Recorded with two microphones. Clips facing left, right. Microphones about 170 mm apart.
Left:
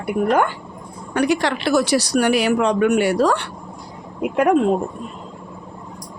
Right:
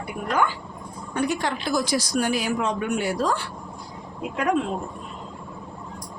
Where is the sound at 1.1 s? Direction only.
90° left; by 3.5 s 70° left (ahead or behind).